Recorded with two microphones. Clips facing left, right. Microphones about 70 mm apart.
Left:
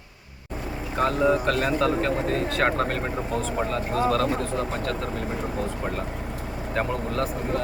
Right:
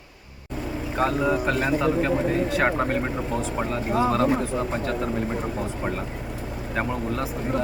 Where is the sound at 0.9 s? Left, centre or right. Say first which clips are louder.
Left 1 dB; centre.